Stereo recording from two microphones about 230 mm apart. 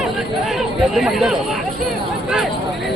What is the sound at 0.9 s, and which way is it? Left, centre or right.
Speech, centre.